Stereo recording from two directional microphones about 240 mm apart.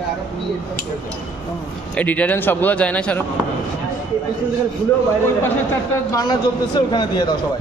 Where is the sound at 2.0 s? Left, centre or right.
Centre.